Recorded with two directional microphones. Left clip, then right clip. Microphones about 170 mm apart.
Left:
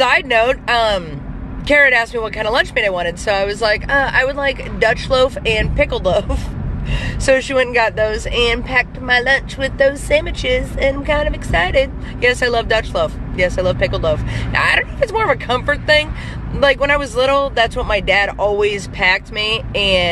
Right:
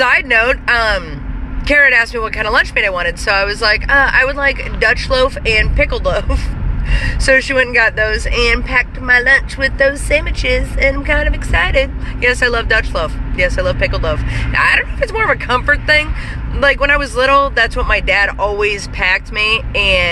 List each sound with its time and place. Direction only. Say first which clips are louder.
0.0 s speech: right 2 dB; 20° left (ahead or behind)